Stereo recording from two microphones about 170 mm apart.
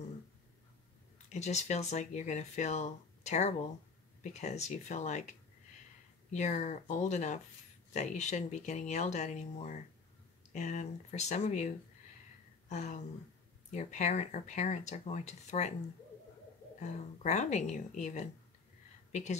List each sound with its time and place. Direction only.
1.3 s speech: 45° left (ahead or behind)
6.3 s speech: 45° left (ahead or behind)
17.2 s speech: 45° left (ahead or behind)